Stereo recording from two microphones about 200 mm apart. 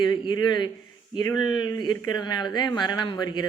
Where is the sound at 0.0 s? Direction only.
20° left (ahead or behind).